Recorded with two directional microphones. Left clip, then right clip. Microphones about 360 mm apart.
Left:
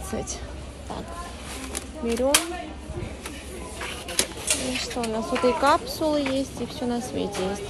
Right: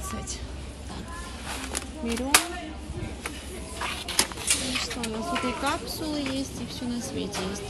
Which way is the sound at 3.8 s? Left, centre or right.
Centre.